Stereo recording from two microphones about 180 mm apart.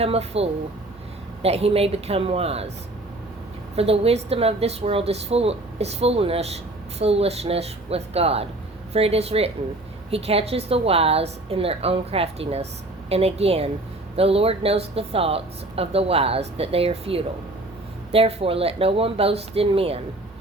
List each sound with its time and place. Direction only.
0.0 s speech: 35° right (ahead or behind)
3.8 s speech: 35° right (ahead or behind)